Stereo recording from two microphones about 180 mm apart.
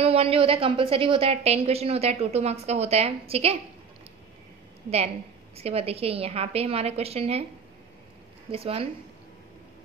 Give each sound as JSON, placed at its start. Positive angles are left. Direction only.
{"t": 0.0, "sound": "a woman's voice", "side_deg": -35}
{"t": 4.8, "sound": "a woman's voice", "side_deg": -35}
{"t": 8.5, "sound": "a woman's voice", "side_deg": -30}